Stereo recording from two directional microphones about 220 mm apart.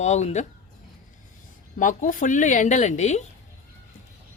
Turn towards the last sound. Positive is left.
turn(degrees=30)  # may be behind; listen again after turning